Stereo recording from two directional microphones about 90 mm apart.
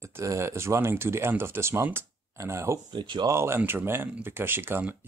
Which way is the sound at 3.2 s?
30° right (ahead or behind).